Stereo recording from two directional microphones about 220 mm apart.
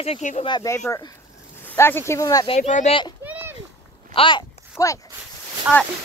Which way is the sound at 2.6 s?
35° left (ahead or behind).